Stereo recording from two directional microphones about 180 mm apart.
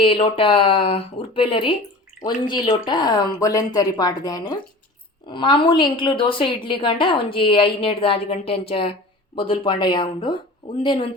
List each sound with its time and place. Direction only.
0.0 s a woman's voice: 30° left (ahead or behind)